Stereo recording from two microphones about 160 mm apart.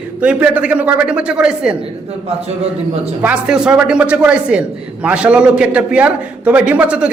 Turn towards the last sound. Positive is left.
turn(degrees=-10)  # may be behind; listen again after turning